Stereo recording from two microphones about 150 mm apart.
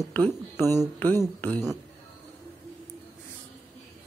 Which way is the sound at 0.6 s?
25° right (ahead or behind).